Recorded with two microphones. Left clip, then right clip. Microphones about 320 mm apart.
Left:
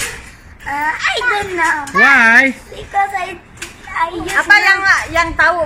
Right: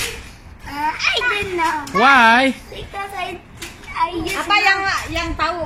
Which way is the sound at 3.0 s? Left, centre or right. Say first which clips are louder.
Left 10 dB; centre.